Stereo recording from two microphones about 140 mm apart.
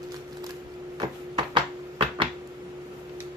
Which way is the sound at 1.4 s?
35° right (ahead or behind).